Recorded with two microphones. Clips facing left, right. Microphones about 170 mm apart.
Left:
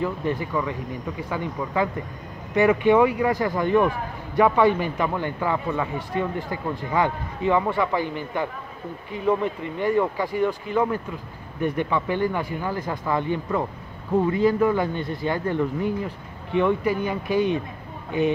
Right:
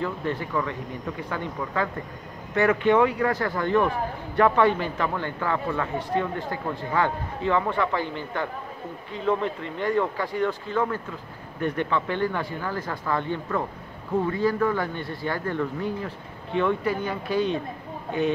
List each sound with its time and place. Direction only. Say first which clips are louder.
0.0 s speech: left 3 dB; 10° left (ahead or behind)